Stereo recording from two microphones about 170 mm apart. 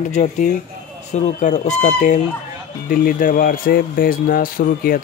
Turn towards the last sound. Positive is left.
turn(degrees=55)  # may be behind; listen again after turning